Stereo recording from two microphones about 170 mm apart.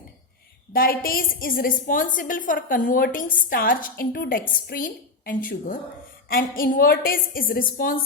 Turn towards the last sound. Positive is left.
turn(degrees=55)  # may be behind; listen again after turning